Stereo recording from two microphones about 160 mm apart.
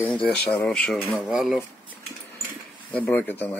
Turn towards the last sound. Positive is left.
turn(degrees=10)  # may be behind; listen again after turning